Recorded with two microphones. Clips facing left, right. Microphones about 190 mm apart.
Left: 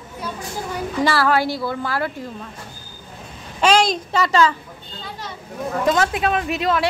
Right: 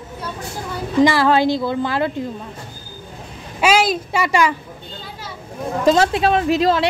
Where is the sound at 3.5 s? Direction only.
5° right (ahead or behind).